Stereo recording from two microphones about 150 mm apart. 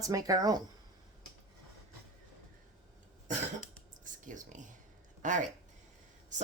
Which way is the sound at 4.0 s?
60° right (ahead or behind).